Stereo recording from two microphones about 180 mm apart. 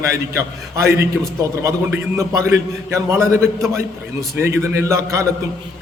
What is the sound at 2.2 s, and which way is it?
A man's voice, 15° right (ahead or behind).